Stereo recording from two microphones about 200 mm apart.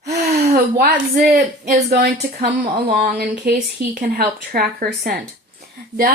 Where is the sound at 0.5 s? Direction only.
50° right (ahead or behind).